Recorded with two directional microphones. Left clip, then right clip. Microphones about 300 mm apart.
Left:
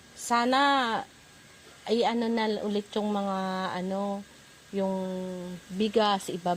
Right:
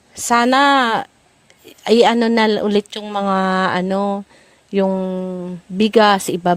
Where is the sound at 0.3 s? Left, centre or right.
Right.